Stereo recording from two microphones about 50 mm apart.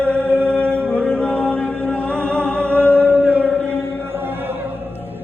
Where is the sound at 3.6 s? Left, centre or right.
Right.